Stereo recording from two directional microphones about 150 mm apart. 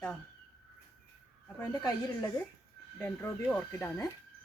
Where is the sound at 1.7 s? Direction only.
25° left (ahead or behind).